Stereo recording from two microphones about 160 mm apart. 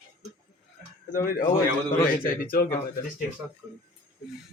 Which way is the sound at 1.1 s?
60° left (ahead or behind).